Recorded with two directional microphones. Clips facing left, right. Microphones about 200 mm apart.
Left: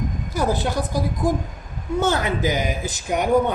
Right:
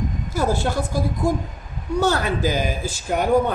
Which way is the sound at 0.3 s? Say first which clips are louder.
Even; 15° left (ahead or behind).